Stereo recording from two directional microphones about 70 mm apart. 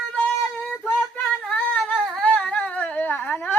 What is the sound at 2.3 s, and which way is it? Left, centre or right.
Humming, centre.